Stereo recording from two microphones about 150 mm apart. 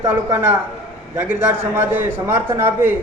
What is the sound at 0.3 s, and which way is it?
A man's voice, 15° right (ahead or behind).